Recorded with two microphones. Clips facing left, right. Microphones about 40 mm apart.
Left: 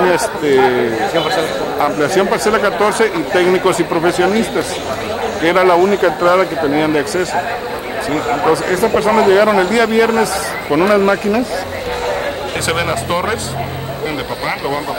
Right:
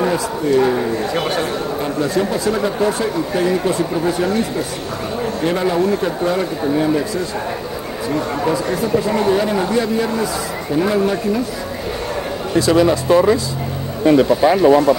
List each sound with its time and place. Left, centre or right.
0.0 s speech: left
1.8 s a man's voice: left
12.5 s speech: left
14.0 s speech: centre